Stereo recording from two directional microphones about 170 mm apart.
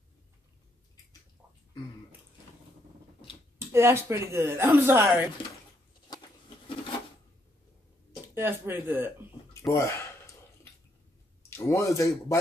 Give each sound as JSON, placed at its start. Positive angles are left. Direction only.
{"t": 3.5, "sound": "speech", "side_deg": -15}
{"t": 8.4, "sound": "speech", "side_deg": -15}
{"t": 9.8, "sound": "speech", "side_deg": 15}
{"t": 11.5, "sound": "speech", "side_deg": 15}